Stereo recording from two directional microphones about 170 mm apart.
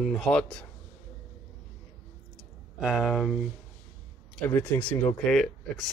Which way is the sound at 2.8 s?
Centre (ahead or behind).